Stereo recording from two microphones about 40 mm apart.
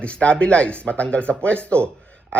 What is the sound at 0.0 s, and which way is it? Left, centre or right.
Speech, left.